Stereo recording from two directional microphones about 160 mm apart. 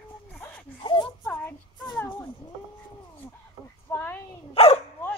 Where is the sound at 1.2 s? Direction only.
10° left (ahead or behind).